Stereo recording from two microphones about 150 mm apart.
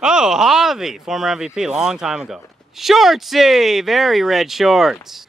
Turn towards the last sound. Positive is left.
turn(degrees=0)  # may be behind; listen again after turning